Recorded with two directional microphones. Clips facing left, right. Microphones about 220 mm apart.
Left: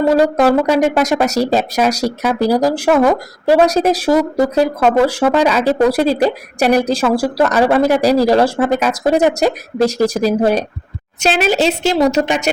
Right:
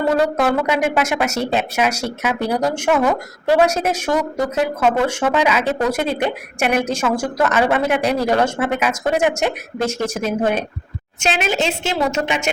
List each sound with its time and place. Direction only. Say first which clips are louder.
0.2 s speech: left 5 dB; 35° left (ahead or behind)